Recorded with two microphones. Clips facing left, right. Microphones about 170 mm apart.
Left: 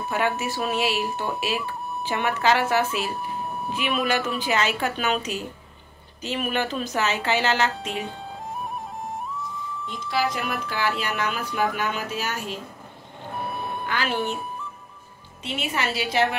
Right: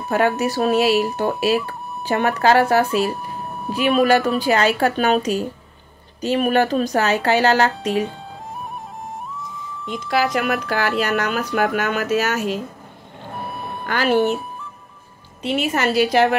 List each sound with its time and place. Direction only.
0.1 s speech: 40° right (ahead or behind)
3.2 s a sound: centre (ahead or behind)
3.7 s speech: 40° right (ahead or behind)
7.9 s music: centre (ahead or behind)
10.0 s speech: 90° right; by 11.0 s 75° right (ahead or behind)
11.0 s speech: 60° right (ahead or behind); by 12.4 s 80° right
13.4 s reversing beeps: centre (ahead or behind)
13.8 s a woman's voice: 45° right (ahead or behind)
15.4 s a woman's voice: 45° right (ahead or behind)